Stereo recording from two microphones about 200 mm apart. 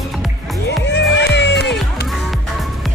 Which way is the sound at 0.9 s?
60° left (ahead or behind).